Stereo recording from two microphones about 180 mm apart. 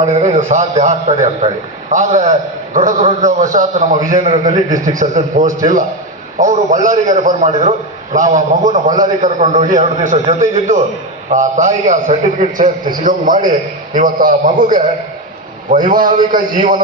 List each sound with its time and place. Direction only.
0.0 s a man's voice: 40° right (ahead or behind)